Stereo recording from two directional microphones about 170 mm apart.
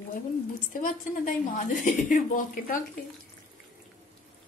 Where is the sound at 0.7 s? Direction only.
50° left (ahead or behind).